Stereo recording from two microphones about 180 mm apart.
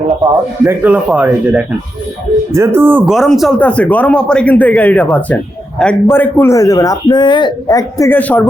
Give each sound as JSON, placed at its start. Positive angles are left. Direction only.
{"t": 0.6, "sound": "speech", "side_deg": -10}
{"t": 3.2, "sound": "speech", "side_deg": 0}